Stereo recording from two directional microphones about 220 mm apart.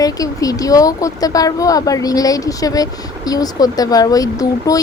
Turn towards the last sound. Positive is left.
turn(degrees=15)  # may be behind; listen again after turning